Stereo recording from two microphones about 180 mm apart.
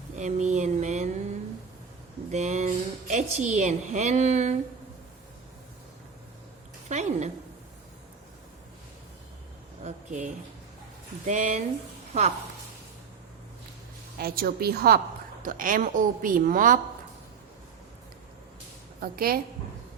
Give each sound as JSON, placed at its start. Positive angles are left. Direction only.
{"t": 0.2, "sound": "speech", "side_deg": -40}
{"t": 2.3, "sound": "speech", "side_deg": -40}
{"t": 6.8, "sound": "a woman's voice", "side_deg": -40}
{"t": 9.8, "sound": "a woman's voice", "side_deg": -40}
{"t": 14.2, "sound": "a woman's voice", "side_deg": -55}
{"t": 15.4, "sound": "a woman's voice", "side_deg": -50}
{"t": 19.0, "sound": "a woman's voice", "side_deg": -55}